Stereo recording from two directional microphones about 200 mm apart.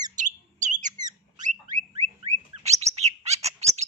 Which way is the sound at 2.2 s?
35° right (ahead or behind).